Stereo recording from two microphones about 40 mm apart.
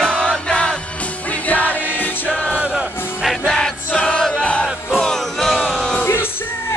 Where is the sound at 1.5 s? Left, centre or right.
Left.